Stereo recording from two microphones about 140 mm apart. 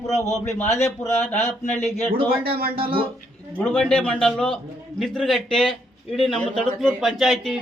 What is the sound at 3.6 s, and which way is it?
A man's voice, 10° left (ahead or behind).